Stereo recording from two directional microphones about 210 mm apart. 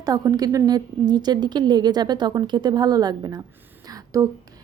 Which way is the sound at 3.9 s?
15° right (ahead or behind).